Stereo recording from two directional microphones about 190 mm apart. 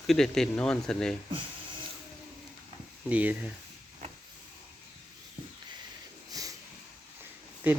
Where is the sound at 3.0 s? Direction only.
5° right (ahead or behind).